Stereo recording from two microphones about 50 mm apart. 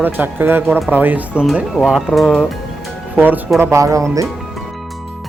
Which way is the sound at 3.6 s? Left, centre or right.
Right.